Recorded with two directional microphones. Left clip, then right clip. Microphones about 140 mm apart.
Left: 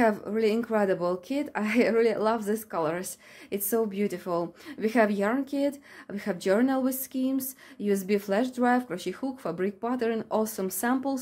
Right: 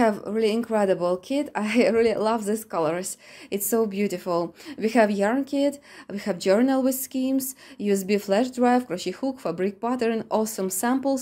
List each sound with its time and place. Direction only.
0.0 s a woman's voice: 15° right (ahead or behind)